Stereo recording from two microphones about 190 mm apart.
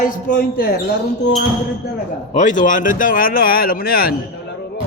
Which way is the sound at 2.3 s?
40° left (ahead or behind).